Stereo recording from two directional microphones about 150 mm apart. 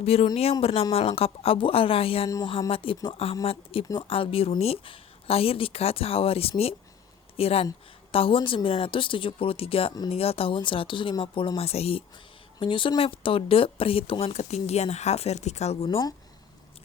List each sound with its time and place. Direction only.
0.0 s speech: 40° left (ahead or behind)